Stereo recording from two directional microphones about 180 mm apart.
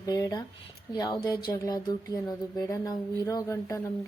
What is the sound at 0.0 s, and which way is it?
A woman's voice, 20° left (ahead or behind).